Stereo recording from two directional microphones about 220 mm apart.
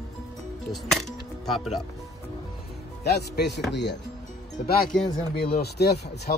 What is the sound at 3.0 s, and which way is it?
Speech, 50° left (ahead or behind).